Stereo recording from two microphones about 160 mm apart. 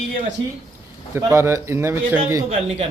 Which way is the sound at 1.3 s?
20° right (ahead or behind).